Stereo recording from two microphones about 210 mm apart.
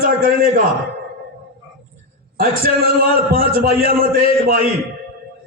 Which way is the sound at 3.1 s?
45° right (ahead or behind).